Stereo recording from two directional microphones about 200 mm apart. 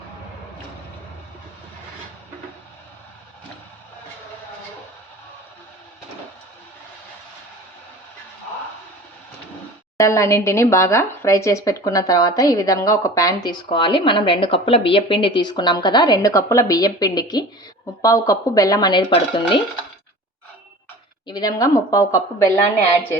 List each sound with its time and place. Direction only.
10.0 s speech: 15° left (ahead or behind)
21.2 s speech: 20° left (ahead or behind)